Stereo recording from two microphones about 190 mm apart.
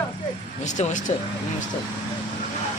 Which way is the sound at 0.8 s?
40° left (ahead or behind).